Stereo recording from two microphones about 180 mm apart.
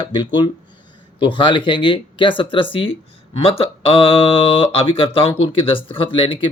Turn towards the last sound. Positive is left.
turn(degrees=30)  # may be behind; listen again after turning